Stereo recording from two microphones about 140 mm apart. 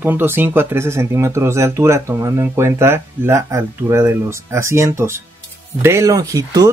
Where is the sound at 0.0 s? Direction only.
15° right (ahead or behind).